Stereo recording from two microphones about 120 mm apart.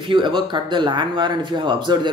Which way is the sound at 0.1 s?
40° right (ahead or behind).